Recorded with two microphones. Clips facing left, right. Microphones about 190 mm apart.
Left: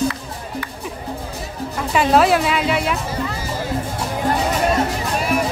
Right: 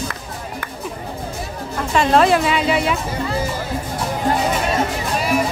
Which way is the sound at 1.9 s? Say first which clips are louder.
Even; 5° left (ahead or behind).